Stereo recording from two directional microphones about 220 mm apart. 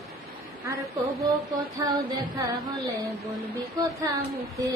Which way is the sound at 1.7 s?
15° right (ahead or behind).